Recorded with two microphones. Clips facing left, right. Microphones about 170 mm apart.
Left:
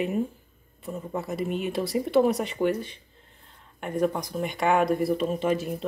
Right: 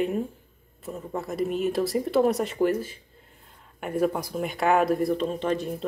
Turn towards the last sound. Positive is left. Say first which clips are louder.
# left 1 dB
turn(degrees=5)  # may be behind; listen again after turning